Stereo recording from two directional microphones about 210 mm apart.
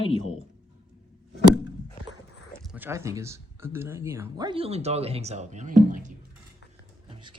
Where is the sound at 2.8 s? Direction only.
10° right (ahead or behind); by 6.1 s 35° right (ahead or behind).